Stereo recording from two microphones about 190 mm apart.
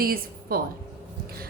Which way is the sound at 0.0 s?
50° right (ahead or behind).